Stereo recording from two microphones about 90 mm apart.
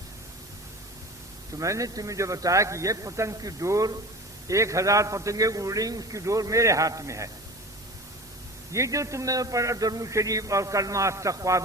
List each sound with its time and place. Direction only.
1.5 s a man's voice: 35° right (ahead or behind)
8.7 s a man's voice: 35° right (ahead or behind)